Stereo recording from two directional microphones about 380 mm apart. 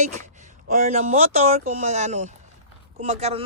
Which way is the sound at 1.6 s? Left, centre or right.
Centre.